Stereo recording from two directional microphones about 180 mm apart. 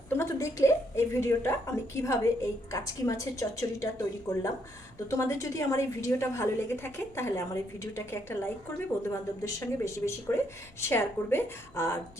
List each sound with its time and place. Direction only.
0.1 s a sound: 15° left (ahead or behind)
2.0 s a woman's voice: 15° left (ahead or behind)
5.1 s a woman's voice: 15° left (ahead or behind)